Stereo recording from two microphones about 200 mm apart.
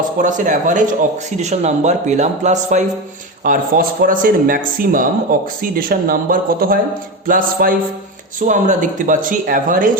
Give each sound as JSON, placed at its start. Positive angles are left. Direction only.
{"t": 0.2, "sound": "speech", "side_deg": -40}